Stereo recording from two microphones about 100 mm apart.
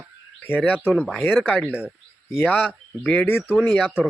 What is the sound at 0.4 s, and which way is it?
Speech, 20° left (ahead or behind).